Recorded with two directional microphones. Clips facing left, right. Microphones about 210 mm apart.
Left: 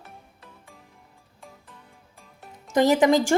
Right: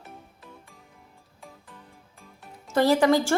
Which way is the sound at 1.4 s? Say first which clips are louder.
Even; centre (ahead or behind).